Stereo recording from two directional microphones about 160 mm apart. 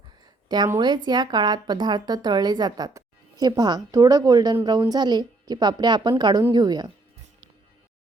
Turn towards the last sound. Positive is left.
turn(degrees=-25)  # may be behind; listen again after turning